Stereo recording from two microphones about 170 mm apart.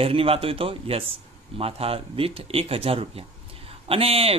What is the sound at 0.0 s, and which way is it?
Speech, 35° right (ahead or behind).